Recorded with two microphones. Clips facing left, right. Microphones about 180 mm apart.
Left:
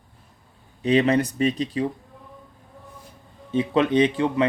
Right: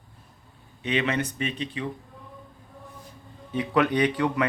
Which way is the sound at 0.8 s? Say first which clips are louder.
Left 7 dB; 35° left (ahead or behind).